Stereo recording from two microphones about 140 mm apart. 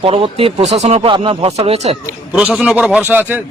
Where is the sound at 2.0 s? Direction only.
10° right (ahead or behind).